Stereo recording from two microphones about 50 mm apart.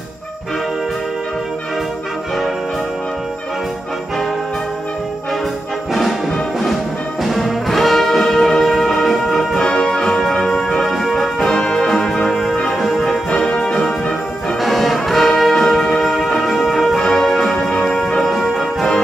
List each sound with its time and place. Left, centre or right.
7.2 s brass instrument: centre
9.6 s music: centre
13.3 s music: centre
14.6 s brass instrument: centre
15.9 s music: centre
18.3 s brass instrument: centre